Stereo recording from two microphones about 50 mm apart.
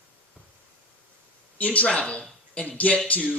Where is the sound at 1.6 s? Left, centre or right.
Left.